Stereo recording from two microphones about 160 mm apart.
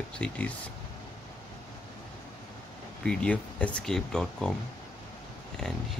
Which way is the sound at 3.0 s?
5° left (ahead or behind).